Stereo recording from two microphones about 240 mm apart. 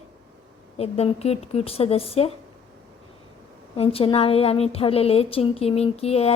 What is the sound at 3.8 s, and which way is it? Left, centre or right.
A woman's voice, left.